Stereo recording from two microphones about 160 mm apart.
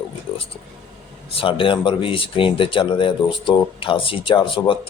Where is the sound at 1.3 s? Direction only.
35° left (ahead or behind).